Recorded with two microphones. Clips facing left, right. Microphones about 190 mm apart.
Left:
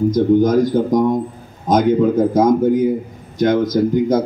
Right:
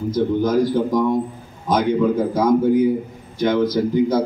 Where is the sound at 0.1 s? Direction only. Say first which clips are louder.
Left 2 dB; 45° left (ahead or behind).